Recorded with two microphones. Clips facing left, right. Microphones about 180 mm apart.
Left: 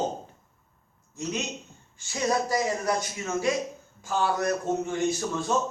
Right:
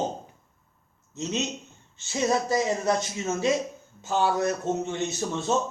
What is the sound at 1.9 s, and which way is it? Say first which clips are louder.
Speech: right 2 dB; 25° right (ahead or behind).